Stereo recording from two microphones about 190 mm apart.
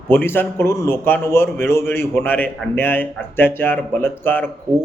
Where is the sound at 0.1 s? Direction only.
10° left (ahead or behind).